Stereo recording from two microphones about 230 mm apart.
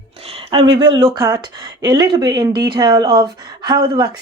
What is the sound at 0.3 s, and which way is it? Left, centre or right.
A woman's voice, right.